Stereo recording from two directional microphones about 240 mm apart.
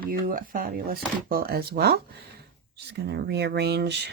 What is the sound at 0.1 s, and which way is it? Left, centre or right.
Speech, right.